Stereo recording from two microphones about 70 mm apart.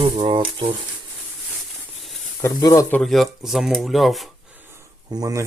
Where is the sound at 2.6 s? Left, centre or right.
Left.